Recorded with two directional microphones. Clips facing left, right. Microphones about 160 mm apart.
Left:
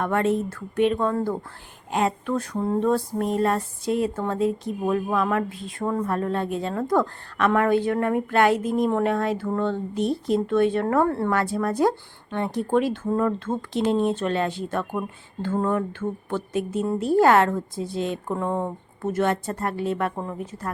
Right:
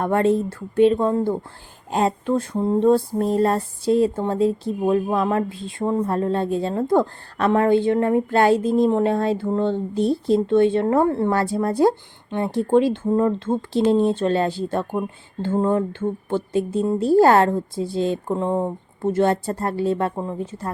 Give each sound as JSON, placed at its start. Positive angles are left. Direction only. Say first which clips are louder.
{"t": 0.0, "sound": "speech", "louder": "right 4 dB", "side_deg": -30}